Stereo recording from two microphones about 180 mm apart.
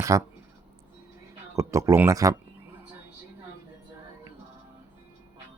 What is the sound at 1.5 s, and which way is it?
Speech, 15° right (ahead or behind).